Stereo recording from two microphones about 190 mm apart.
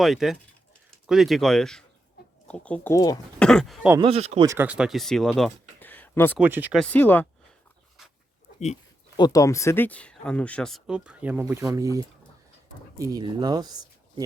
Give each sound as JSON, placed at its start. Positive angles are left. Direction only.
{"t": 0.0, "sound": "speech", "side_deg": 0}
{"t": 3.3, "sound": "speech", "side_deg": 5}
{"t": 4.0, "sound": "speech", "side_deg": -35}
{"t": 4.4, "sound": "speech", "side_deg": -10}
{"t": 6.4, "sound": "speech", "side_deg": -10}
{"t": 6.7, "sound": "speech", "side_deg": 10}
{"t": 8.5, "sound": "speech", "side_deg": 35}
{"t": 9.1, "sound": "speech", "side_deg": 20}